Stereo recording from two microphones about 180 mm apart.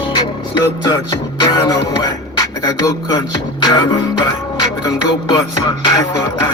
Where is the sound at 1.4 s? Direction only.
20° left (ahead or behind).